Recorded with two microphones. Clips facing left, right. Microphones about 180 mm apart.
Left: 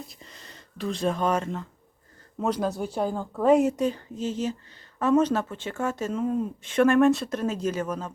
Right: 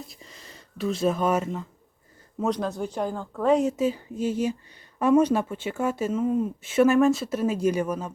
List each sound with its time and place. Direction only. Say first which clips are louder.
0.1 s speech: right 1 dB; centre (ahead or behind)
2.4 s speech: even; 5° left (ahead or behind); by 8.1 s 10° right (ahead or behind)